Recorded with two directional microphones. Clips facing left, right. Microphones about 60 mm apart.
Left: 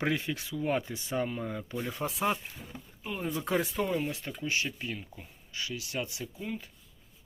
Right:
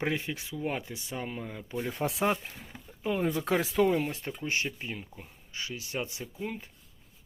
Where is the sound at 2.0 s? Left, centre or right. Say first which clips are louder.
Right 4 dB; right.